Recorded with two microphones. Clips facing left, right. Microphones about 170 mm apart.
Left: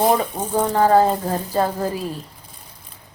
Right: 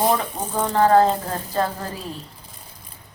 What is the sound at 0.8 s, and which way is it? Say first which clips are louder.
Speech: even; 10° left (ahead or behind).